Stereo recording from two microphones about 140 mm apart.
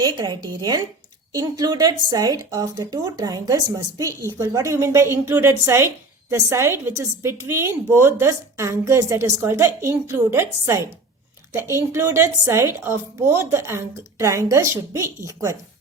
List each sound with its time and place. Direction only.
0.0 s a woman's voice: 30° right (ahead or behind)